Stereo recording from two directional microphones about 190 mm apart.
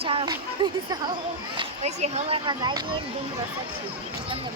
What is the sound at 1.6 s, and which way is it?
Speech, 35° right (ahead or behind).